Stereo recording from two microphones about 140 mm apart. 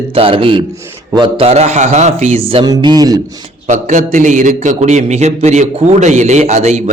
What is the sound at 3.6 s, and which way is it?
A man's voice, 60° right (ahead or behind).